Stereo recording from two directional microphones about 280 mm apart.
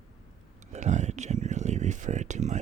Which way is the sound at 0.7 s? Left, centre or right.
Right.